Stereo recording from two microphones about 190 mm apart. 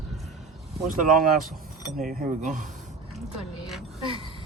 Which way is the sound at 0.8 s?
45° right (ahead or behind).